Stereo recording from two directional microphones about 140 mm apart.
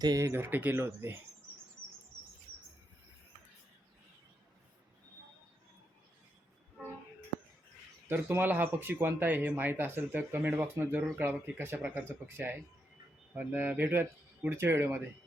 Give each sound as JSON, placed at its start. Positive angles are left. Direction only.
{"t": 0.0, "sound": "speech", "side_deg": -25}
{"t": 8.0, "sound": "speech", "side_deg": -15}